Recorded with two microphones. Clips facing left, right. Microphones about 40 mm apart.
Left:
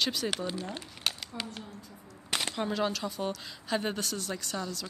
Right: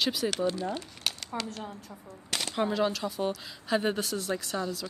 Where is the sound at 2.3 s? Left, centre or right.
Centre.